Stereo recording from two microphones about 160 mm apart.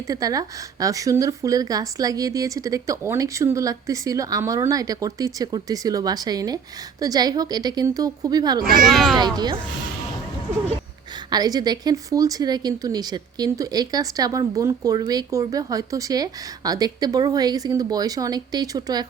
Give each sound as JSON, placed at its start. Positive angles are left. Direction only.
{"t": 0.1, "sound": "speech", "side_deg": -20}
{"t": 8.8, "sound": "speech", "side_deg": 0}
{"t": 9.1, "sound": "speech", "side_deg": -25}
{"t": 11.3, "sound": "speech", "side_deg": -25}